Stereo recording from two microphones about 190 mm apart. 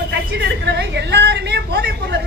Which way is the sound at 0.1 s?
65° right (ahead or behind).